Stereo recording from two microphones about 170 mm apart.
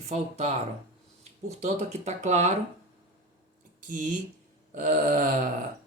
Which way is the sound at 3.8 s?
50° right (ahead or behind).